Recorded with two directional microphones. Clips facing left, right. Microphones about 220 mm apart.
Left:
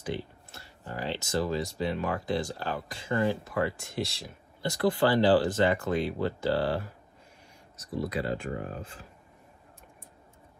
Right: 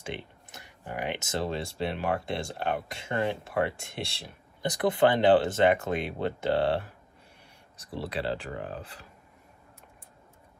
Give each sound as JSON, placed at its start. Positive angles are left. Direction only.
{"t": 0.0, "sound": "a sound", "side_deg": -20}
{"t": 1.9, "sound": "speech", "side_deg": -25}
{"t": 8.1, "sound": "speech", "side_deg": -30}